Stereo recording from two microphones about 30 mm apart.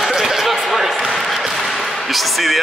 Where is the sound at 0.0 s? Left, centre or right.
Centre.